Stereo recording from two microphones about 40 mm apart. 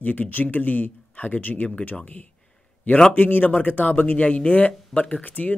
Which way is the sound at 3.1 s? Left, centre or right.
Left.